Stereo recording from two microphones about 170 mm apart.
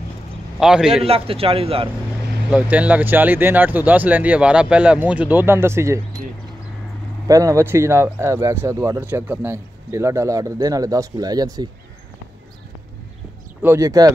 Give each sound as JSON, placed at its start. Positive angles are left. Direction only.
{"t": 0.6, "sound": "a man's voice", "side_deg": -5}
{"t": 1.0, "sound": "speech", "side_deg": -35}
{"t": 2.5, "sound": "speech", "side_deg": -10}
{"t": 7.2, "sound": "speech", "side_deg": -20}
{"t": 13.6, "sound": "speech", "side_deg": -15}